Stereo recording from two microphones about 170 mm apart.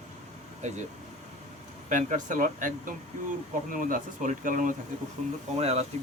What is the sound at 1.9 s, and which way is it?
Speech, 50° right (ahead or behind).